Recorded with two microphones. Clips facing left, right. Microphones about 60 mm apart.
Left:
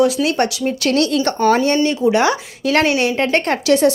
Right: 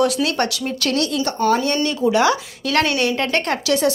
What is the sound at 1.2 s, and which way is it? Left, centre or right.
Speech, left.